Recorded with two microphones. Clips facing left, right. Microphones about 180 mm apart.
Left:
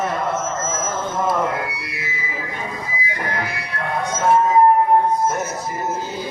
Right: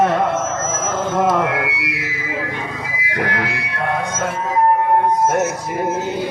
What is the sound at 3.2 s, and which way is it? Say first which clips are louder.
Music: right 5 dB; 80° right.